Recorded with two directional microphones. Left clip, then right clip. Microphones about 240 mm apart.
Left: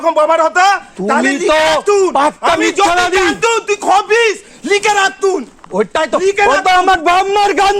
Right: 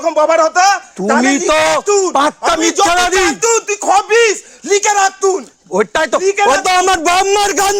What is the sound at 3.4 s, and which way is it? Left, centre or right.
A man's voice, centre.